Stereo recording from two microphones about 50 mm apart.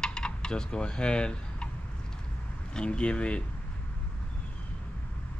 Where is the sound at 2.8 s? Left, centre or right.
Left.